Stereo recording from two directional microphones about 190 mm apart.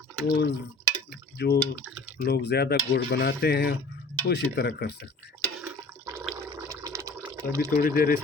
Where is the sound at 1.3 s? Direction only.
60° left (ahead or behind).